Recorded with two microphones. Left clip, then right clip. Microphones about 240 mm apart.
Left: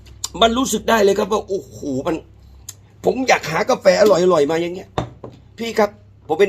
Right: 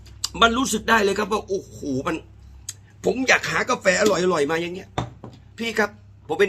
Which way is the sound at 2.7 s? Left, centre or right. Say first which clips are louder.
Left 4 dB; centre.